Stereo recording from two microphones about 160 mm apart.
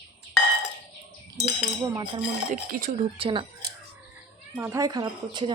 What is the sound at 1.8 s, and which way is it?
Speech, 30° right (ahead or behind).